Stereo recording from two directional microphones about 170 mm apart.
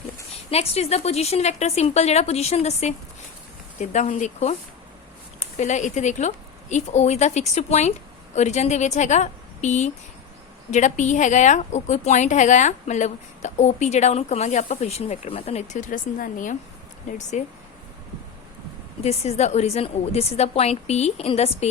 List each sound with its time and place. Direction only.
0.5 s a woman's voice: 35° left (ahead or behind)
19.0 s a woman's voice: 40° left (ahead or behind)